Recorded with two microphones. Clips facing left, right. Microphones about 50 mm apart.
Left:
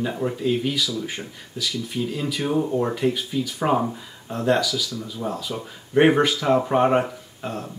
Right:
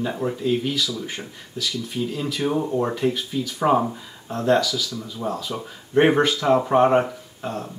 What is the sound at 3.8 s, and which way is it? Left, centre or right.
Speech, centre.